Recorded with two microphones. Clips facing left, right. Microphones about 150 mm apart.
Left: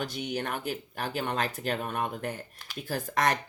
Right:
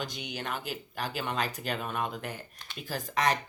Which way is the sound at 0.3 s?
55° left (ahead or behind).